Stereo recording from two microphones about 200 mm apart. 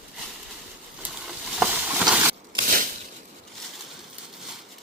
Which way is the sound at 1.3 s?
5° right (ahead or behind).